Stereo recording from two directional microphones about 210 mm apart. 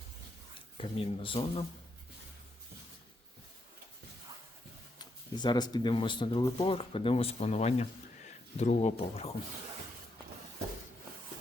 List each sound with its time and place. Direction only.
0.8 s speech: 25° left (ahead or behind)
4.9 s speech: 20° left (ahead or behind)